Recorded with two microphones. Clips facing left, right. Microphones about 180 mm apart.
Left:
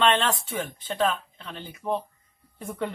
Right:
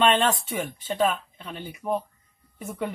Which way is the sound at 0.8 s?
10° right (ahead or behind).